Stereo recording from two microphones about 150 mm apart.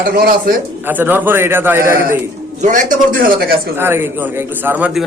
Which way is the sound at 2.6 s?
60° right (ahead or behind).